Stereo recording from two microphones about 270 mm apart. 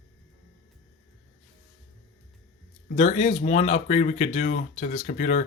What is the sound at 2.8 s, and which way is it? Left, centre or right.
Speech, left.